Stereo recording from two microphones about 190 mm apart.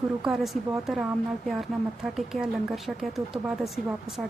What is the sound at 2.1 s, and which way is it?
Speech, centre (ahead or behind).